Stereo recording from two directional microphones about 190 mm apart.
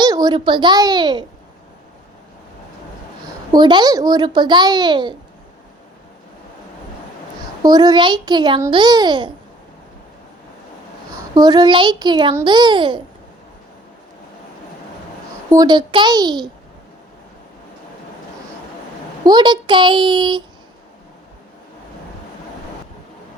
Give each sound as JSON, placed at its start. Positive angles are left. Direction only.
{"t": 0.0, "sound": "a child's voice", "side_deg": -20}
{"t": 3.5, "sound": "a child's voice", "side_deg": -25}
{"t": 7.6, "sound": "a child's voice", "side_deg": -20}
{"t": 11.3, "sound": "a child's voice", "side_deg": -20}
{"t": 15.4, "sound": "a child's voice", "side_deg": -20}
{"t": 19.2, "sound": "a child's voice", "side_deg": -20}